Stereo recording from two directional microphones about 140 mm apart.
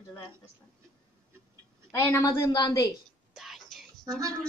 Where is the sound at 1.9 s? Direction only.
20° left (ahead or behind).